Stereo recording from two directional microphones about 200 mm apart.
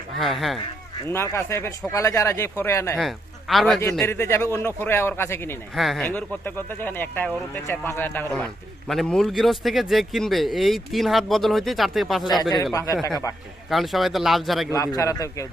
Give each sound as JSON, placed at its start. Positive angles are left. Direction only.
{"t": 0.2, "sound": "speech", "side_deg": 0}
{"t": 1.0, "sound": "speech", "side_deg": 15}
{"t": 3.0, "sound": "speech", "side_deg": 0}
{"t": 3.9, "sound": "speech", "side_deg": 10}
{"t": 5.7, "sound": "speech", "side_deg": 0}
{"t": 12.4, "sound": "speech", "side_deg": 20}
{"t": 13.7, "sound": "speech", "side_deg": 0}
{"t": 14.7, "sound": "speech", "side_deg": 15}